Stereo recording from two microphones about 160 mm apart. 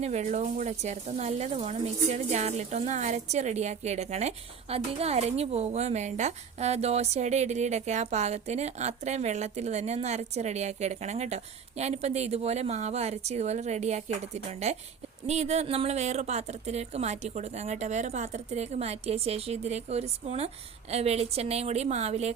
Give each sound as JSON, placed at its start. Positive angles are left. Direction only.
{"t": 0.0, "sound": "a woman's voice", "side_deg": -45}